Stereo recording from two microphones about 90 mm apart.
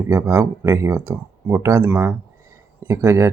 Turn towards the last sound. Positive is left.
turn(degrees=-35)  # may be behind; listen again after turning